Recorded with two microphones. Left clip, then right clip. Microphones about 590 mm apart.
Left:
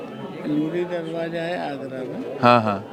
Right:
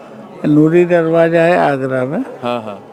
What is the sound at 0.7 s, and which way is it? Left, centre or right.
Speech, right.